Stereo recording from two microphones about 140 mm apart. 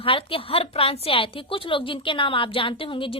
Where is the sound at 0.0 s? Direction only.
40° left (ahead or behind).